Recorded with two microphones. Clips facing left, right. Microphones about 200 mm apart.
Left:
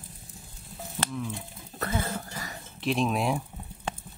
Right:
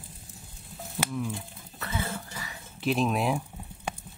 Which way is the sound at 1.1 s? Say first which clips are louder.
Right 3 dB; 5° right (ahead or behind).